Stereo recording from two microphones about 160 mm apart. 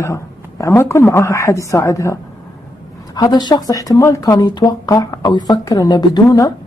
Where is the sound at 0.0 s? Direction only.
20° left (ahead or behind).